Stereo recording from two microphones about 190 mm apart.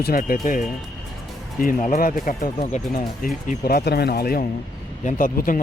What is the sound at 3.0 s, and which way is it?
Speech, 50° left (ahead or behind).